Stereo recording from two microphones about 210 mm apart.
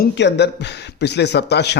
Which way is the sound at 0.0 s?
55° left (ahead or behind).